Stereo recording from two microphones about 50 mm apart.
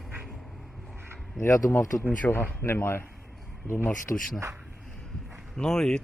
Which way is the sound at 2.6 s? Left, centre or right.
Left.